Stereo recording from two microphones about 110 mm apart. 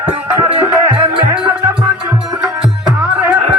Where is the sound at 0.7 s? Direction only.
15° right (ahead or behind).